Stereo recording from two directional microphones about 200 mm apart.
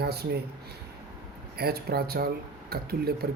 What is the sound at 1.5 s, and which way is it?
Speech, 50° right (ahead or behind).